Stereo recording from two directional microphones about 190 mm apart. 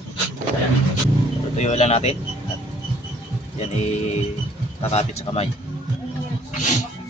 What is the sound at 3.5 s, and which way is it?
Speech, 35° left (ahead or behind).